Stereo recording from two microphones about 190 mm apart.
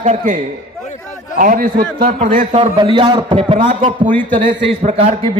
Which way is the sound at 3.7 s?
40° right (ahead or behind).